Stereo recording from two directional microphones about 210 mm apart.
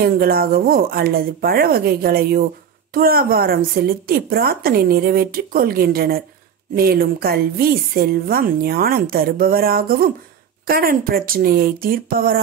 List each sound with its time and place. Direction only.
0.0 s a woman's voice: 45° right (ahead or behind)